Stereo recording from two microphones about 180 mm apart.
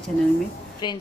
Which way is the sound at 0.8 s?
25° left (ahead or behind).